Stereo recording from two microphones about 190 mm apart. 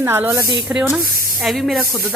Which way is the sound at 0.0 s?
10° right (ahead or behind).